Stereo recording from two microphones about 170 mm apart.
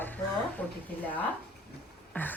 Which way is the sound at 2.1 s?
10° left (ahead or behind).